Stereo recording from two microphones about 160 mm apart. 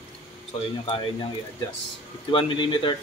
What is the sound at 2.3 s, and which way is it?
Speech, 30° left (ahead or behind).